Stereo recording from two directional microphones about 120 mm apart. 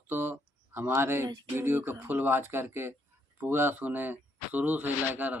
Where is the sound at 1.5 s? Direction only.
15° right (ahead or behind).